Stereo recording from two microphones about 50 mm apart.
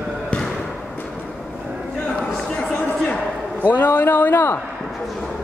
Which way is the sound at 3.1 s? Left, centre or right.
Left.